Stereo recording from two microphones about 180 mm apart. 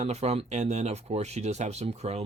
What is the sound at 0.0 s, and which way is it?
Speech, 35° right (ahead or behind).